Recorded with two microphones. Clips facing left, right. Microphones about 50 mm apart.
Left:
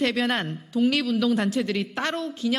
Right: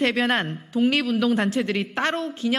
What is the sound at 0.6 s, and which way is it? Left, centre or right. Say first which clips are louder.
Speech: right 1 dB; right.